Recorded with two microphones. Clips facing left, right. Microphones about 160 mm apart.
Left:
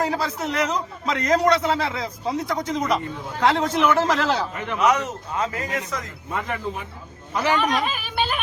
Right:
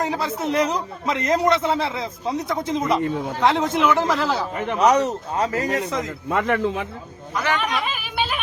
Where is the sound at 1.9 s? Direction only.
25° right (ahead or behind).